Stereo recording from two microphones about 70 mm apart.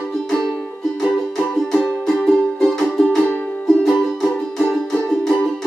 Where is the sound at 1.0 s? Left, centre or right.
Centre.